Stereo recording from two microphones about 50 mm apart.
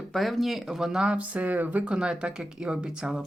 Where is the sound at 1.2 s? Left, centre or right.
Right.